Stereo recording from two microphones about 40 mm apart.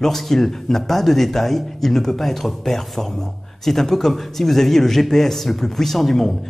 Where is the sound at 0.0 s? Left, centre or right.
Centre.